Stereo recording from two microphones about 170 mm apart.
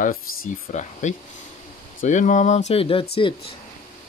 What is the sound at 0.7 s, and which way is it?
Speech, 45° left (ahead or behind).